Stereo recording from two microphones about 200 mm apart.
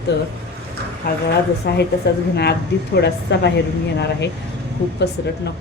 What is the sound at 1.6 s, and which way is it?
Speech, 55° left (ahead or behind).